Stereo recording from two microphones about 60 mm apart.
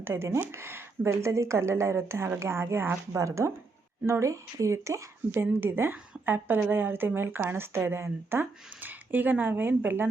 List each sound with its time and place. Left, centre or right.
0.0 s speech: right
3.1 s speech: right
5.4 s a woman's voice: right
8.8 s a woman's voice: right